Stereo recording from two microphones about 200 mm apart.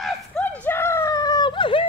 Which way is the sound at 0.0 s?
5° left (ahead or behind).